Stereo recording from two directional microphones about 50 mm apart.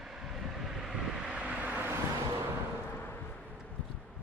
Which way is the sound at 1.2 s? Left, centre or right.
Right.